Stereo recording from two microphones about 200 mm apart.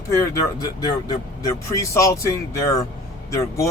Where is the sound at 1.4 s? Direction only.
15° left (ahead or behind).